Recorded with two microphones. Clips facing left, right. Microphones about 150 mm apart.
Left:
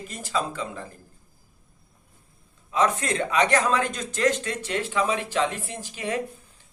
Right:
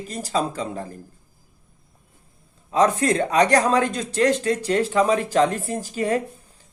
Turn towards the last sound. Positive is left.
turn(degrees=-40)  # may be behind; listen again after turning